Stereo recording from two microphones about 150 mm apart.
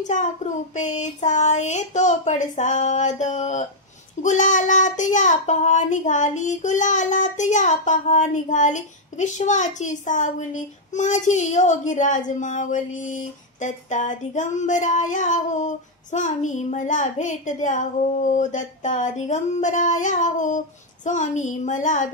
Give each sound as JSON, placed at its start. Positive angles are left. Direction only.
{"t": 0.0, "sound": "child singing", "side_deg": 55}